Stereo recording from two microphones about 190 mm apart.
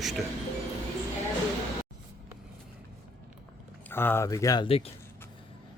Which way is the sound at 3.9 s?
10° left (ahead or behind).